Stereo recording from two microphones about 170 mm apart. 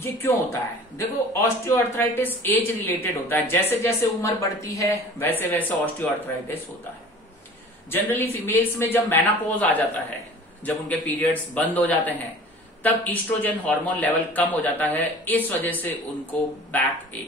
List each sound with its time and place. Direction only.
0.0 s a man's voice: 15° left (ahead or behind)
7.9 s a man's voice: 15° left (ahead or behind)